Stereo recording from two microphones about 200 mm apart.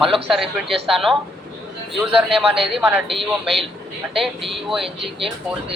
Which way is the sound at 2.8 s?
10° right (ahead or behind).